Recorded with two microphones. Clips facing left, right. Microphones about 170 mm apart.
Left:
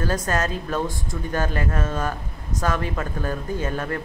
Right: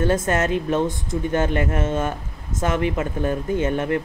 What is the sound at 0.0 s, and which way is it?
Speech, 25° right (ahead or behind).